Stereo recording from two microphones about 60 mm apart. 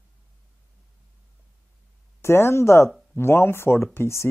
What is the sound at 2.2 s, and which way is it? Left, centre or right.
Speech, left.